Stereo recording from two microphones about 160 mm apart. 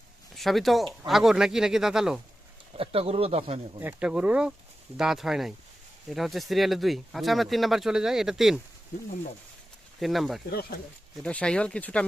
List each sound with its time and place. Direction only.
0.3 s speech: centre (ahead or behind)
2.7 s speech: 35° right (ahead or behind)
3.8 s speech: 10° right (ahead or behind)
10.0 s speech: centre (ahead or behind)